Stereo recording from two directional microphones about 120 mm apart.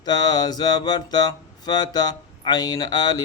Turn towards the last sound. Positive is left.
turn(degrees=35)  # may be behind; listen again after turning